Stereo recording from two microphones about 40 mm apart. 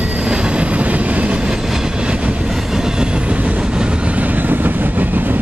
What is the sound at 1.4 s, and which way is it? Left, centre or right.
Train, right.